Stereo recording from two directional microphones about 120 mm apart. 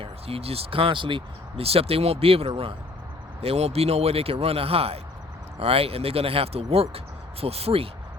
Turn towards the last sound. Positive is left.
turn(degrees=-55)  # may be behind; listen again after turning